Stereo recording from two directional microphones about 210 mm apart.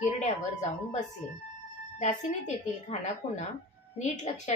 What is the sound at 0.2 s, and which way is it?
A woman's voice, 35° left (ahead or behind).